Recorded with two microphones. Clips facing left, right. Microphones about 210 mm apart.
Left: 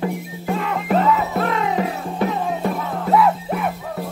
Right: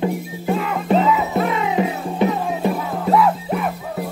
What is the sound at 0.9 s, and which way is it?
Music, centre (ahead or behind).